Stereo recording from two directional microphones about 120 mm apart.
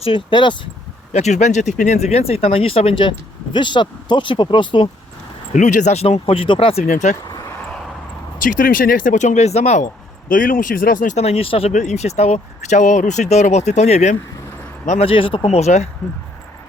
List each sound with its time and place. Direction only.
0.0 s speech: 45° left (ahead or behind)
1.1 s speech: 70° left (ahead or behind); by 4.9 s 40° left (ahead or behind)
5.5 s speech: 85° left; by 6.8 s 50° left (ahead or behind)
6.9 s speech: 90° left
8.4 s speech: 90° left; by 9.9 s 70° left (ahead or behind)
10.6 s speech: 90° left; by 11.7 s 50° left (ahead or behind)
11.7 s speech: 75° left (ahead or behind)
14.8 s speech: 55° left (ahead or behind)
15.4 s speech: 65° left (ahead or behind)